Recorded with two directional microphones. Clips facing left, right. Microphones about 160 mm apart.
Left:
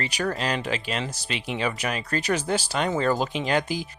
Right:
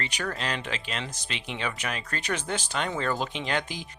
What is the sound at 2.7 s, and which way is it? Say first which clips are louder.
Speech: left 5 dB; 35° left (ahead or behind).